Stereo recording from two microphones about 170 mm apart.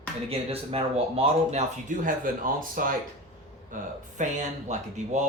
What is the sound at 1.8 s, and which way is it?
Speech, 50° right (ahead or behind).